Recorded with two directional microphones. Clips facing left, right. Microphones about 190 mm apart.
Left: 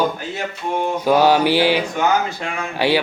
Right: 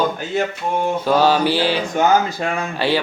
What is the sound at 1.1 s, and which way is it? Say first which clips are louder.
Mantra: left 2 dB; 15° left (ahead or behind).